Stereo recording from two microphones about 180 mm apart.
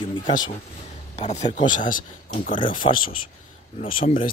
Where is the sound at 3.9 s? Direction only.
50° left (ahead or behind).